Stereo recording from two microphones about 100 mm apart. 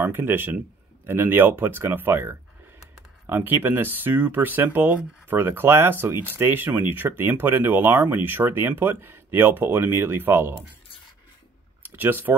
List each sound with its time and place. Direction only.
0.0 s speech: 25° right (ahead or behind)
11.8 s speech: 20° right (ahead or behind)